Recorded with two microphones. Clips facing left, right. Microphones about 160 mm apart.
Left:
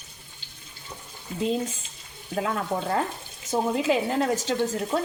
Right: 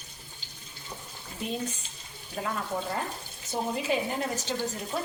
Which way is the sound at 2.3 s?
80° left.